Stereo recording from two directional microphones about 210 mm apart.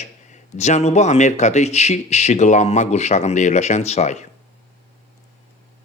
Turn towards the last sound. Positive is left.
turn(degrees=35)  # may be behind; listen again after turning